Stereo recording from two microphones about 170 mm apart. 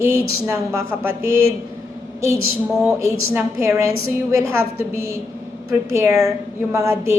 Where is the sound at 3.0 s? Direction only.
15° right (ahead or behind).